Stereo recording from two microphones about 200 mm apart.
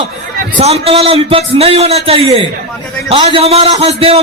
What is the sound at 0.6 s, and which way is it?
A man's voice, 30° right (ahead or behind).